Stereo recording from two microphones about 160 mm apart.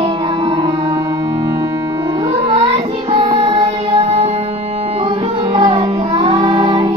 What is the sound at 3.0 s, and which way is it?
Music, 40° right (ahead or behind).